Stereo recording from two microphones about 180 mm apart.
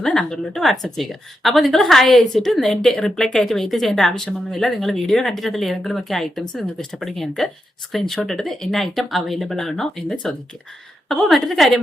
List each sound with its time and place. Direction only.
0.0 s a woman's voice: 5° left (ahead or behind)